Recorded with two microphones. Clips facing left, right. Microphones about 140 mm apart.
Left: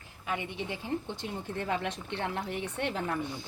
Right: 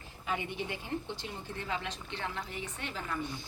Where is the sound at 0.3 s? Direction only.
20° left (ahead or behind).